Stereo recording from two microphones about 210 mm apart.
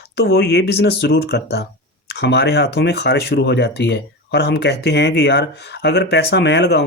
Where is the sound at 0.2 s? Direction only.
50° left (ahead or behind).